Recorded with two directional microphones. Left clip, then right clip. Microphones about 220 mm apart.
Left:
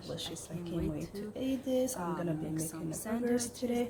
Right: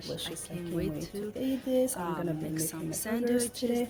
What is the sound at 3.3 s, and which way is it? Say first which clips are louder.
Speech: right 4 dB; 20° right (ahead or behind).